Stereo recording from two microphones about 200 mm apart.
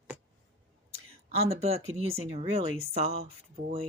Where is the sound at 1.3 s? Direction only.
30° right (ahead or behind).